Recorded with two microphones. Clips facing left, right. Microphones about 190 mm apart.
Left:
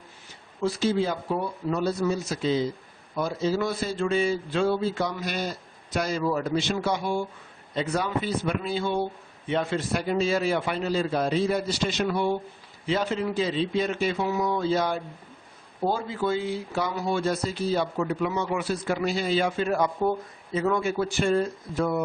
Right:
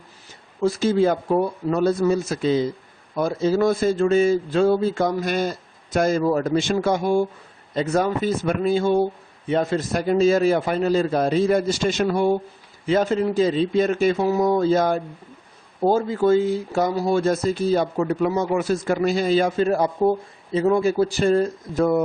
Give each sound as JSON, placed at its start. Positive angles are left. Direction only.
{"t": 0.6, "sound": "speech", "side_deg": -45}